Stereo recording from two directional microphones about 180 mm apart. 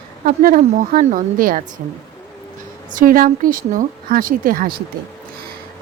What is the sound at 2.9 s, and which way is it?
Speech, 50° right (ahead or behind).